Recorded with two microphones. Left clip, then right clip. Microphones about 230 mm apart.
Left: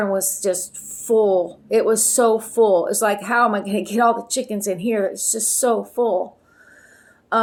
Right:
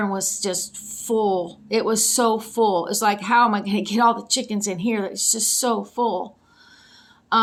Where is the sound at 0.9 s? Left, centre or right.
Right.